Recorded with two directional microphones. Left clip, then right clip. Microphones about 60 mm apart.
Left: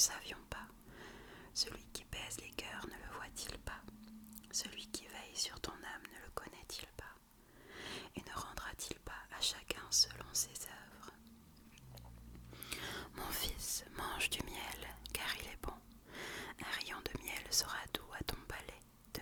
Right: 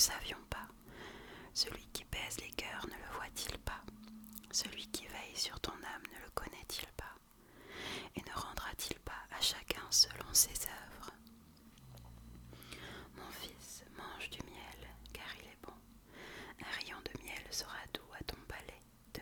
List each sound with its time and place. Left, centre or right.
0.0 s whispering: right
12.5 s whispering: left
16.4 s whispering: centre
16.6 s whispering: centre
17.5 s speech: centre
17.7 s whispering: centre